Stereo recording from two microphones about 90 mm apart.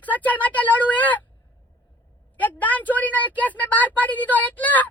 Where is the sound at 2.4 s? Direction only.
20° left (ahead or behind).